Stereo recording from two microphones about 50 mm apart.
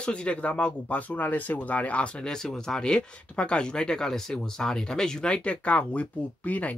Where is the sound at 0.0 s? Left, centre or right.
Left.